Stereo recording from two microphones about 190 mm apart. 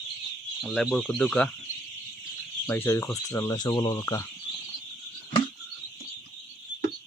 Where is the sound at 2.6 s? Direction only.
10° left (ahead or behind).